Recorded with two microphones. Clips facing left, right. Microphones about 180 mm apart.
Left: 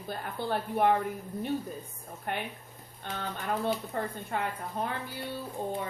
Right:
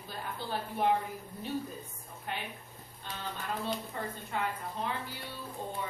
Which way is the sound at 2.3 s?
55° left (ahead or behind).